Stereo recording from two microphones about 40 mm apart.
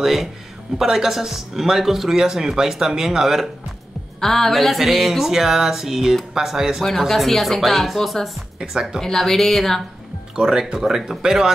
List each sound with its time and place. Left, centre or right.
0.0 s speech: centre
4.2 s speech: centre
6.8 s speech: centre
10.3 s speech: centre